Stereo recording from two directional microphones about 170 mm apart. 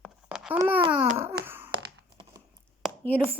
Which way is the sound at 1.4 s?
10° right (ahead or behind).